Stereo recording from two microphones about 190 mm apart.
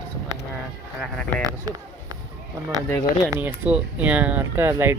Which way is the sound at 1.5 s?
20° right (ahead or behind).